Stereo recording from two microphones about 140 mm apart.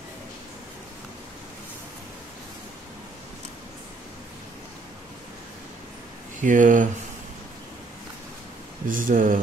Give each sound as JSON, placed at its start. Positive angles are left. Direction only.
{"t": 6.4, "sound": "speech", "side_deg": -70}
{"t": 8.8, "sound": "speech", "side_deg": -75}